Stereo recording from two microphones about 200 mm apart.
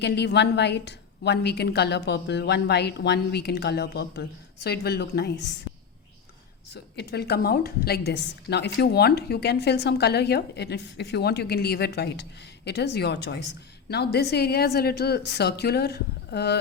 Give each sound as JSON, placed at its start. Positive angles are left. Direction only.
{"t": 0.0, "sound": "a woman's voice", "side_deg": 60}
{"t": 6.9, "sound": "a woman's voice", "side_deg": 55}